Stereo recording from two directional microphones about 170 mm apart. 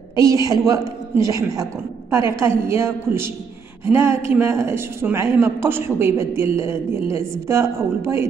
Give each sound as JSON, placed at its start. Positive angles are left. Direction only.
{"t": 0.1, "sound": "a man's voice", "side_deg": -20}